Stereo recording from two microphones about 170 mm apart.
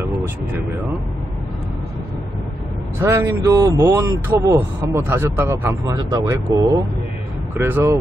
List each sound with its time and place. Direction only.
3.0 s a man's voice: 15° right (ahead or behind)